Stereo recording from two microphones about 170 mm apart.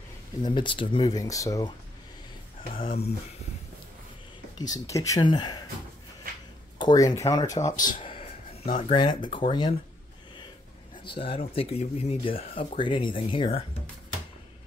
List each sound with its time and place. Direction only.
0.4 s speech: 30° left (ahead or behind)
4.6 s speech: 20° left (ahead or behind)
6.8 s speech: 25° left (ahead or behind)
7.6 s speech: 50° left (ahead or behind)
8.0 s a sound: 35° left (ahead or behind)
8.7 s speech: 35° left (ahead or behind)
11.1 s speech: 30° left (ahead or behind)